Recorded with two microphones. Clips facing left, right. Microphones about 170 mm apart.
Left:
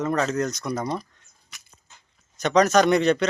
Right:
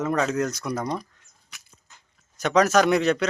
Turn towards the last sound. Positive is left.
turn(degrees=-5)  # may be behind; listen again after turning